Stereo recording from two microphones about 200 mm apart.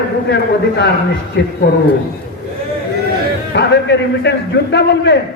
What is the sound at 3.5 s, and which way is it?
A man's voice, 60° left (ahead or behind).